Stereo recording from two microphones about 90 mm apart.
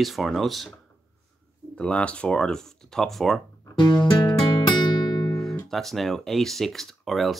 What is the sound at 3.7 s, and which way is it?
Music, 55° left (ahead or behind).